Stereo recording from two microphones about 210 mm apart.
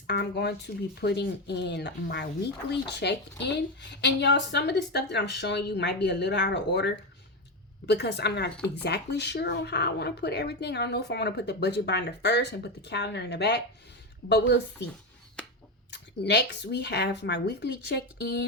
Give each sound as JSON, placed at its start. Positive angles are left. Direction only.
{"t": 0.1, "sound": "speech", "side_deg": 55}
{"t": 15.9, "sound": "speech", "side_deg": 55}